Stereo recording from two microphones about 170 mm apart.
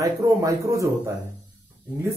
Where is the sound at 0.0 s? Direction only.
20° right (ahead or behind).